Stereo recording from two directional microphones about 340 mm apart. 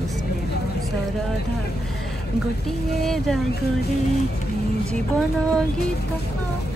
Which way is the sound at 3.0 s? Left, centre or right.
Centre.